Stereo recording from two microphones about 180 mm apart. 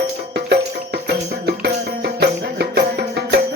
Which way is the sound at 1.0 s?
65° right (ahead or behind).